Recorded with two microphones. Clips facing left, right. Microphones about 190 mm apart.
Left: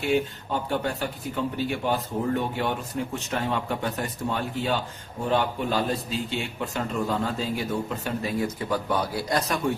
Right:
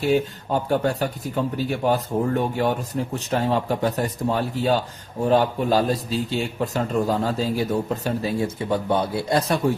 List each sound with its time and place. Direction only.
0.0 s a man's voice: 40° right (ahead or behind)